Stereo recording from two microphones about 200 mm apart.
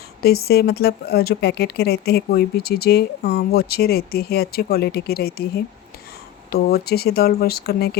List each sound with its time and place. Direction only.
0.2 s speech: 50° left (ahead or behind)